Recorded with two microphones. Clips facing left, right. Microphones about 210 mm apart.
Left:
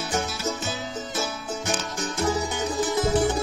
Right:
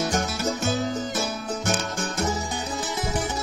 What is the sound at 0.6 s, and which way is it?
Music, 60° right (ahead or behind).